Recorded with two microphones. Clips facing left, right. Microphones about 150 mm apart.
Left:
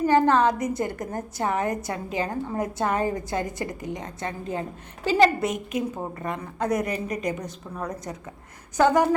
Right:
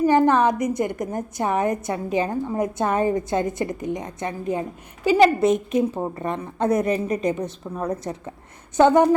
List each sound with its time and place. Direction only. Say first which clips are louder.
0.0 s a woman's voice: right 2 dB; 15° right (ahead or behind)
5.5 s a woman's voice: right 8 dB; 25° right (ahead or behind)